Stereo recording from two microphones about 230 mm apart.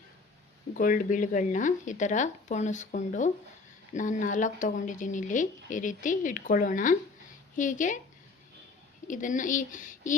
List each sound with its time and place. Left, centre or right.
0.7 s speech: left
9.0 s speech: left